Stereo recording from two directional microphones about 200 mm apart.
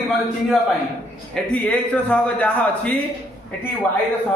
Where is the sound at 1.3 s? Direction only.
5° left (ahead or behind).